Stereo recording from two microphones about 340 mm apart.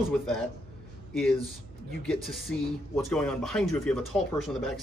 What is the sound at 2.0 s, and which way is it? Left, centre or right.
Speech, centre.